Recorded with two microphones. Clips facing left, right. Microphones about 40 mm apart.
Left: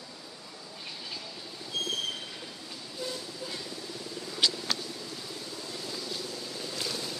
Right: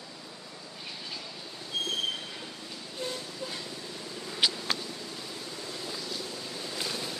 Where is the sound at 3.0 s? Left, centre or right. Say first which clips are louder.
Right 1 dB; right.